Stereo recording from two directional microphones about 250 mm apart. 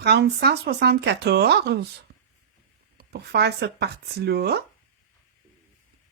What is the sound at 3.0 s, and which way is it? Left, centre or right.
Speech, right.